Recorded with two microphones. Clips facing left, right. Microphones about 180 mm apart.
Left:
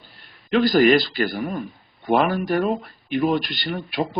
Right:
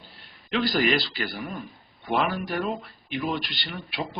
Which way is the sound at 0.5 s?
45° left (ahead or behind).